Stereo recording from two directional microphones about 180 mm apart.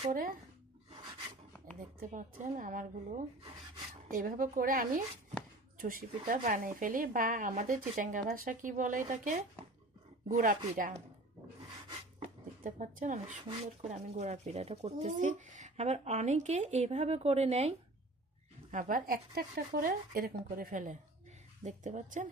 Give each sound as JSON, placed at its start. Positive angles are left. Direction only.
{"t": 0.1, "sound": "speech", "side_deg": -50}
{"t": 1.8, "sound": "speech", "side_deg": -50}
{"t": 12.6, "sound": "speech", "side_deg": -45}
{"t": 18.7, "sound": "speech", "side_deg": -50}